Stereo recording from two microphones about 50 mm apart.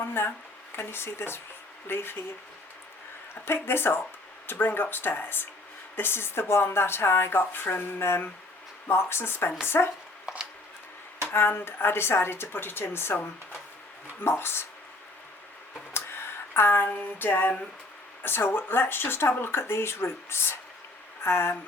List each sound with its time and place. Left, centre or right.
0.0 s speech: left
3.4 s speech: left
11.2 s speech: left
11.8 s speech: left
14.3 s speech: left
15.9 s a sound: left
18.2 s speech: left